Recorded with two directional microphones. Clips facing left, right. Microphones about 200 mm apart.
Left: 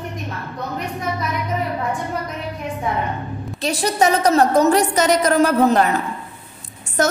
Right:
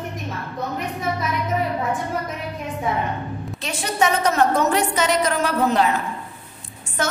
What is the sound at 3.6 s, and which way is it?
A woman's voice, 35° left (ahead or behind).